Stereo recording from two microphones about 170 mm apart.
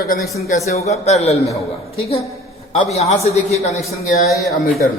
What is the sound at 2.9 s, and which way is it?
Speech, 40° left (ahead or behind).